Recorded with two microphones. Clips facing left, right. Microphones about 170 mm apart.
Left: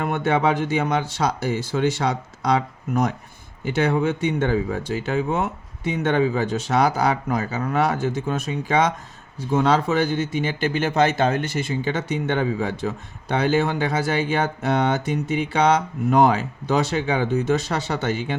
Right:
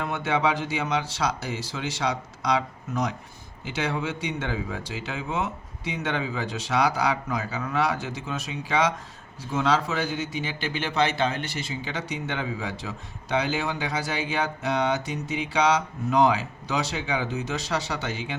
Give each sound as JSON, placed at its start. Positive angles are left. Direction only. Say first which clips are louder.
{"t": 0.0, "sound": "speech", "louder": "left 5 dB", "side_deg": 50}